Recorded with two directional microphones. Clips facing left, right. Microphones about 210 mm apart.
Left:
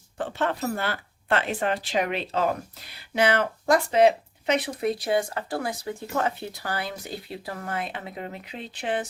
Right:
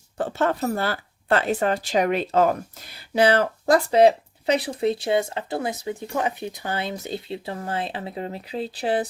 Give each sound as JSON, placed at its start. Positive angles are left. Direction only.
{"t": 0.2, "sound": "speech", "side_deg": -40}
{"t": 3.2, "sound": "speech", "side_deg": -35}